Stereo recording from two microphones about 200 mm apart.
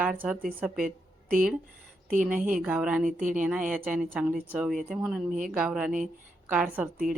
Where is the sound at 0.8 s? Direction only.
45° right (ahead or behind).